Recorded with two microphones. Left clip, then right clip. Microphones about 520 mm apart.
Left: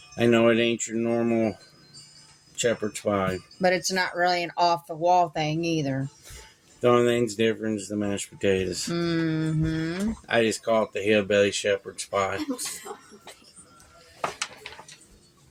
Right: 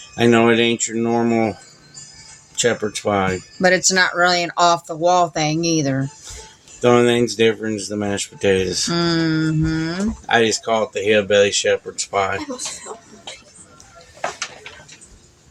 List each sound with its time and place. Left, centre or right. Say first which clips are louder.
0.2 s speech: right 6 dB; left
2.6 s speech: right 7 dB; left